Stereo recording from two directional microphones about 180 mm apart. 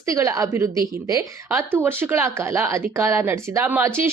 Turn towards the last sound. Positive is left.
turn(degrees=-15)  # may be behind; listen again after turning